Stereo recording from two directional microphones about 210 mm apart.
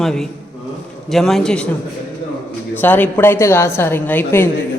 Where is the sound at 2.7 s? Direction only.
10° left (ahead or behind).